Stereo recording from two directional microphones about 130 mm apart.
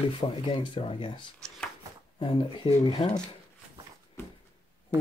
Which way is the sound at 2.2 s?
40° left (ahead or behind).